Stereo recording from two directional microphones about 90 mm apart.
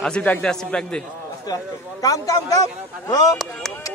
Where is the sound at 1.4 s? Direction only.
45° left (ahead or behind).